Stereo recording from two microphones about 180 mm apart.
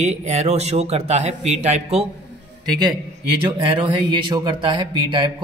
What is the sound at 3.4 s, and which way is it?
Speech, 30° right (ahead or behind).